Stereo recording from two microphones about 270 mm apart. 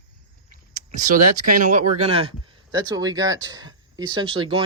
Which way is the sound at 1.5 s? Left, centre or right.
Right.